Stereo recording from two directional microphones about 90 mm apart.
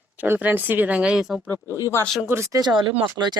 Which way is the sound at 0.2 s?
20° right (ahead or behind).